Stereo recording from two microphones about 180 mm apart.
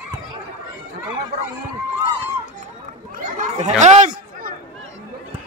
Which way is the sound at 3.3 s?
40° right (ahead or behind).